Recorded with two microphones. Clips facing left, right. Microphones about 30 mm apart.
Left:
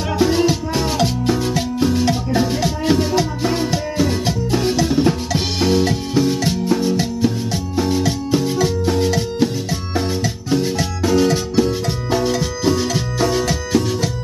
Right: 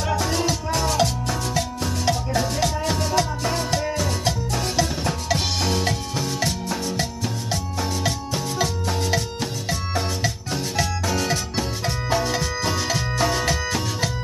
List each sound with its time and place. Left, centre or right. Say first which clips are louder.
0.1 s music: left 8 dB; centre
5.6 s drum kit: left 8 dB; centre
6.1 s music: left 8 dB; centre
9.4 s music: left 7 dB; centre
11.2 s music: left 8 dB; centre